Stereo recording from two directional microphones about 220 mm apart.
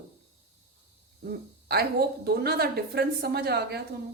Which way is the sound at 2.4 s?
45° right (ahead or behind).